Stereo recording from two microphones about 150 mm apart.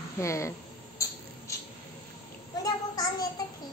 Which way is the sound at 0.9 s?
20° left (ahead or behind).